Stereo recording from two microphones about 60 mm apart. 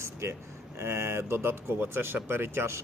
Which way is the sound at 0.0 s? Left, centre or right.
Right.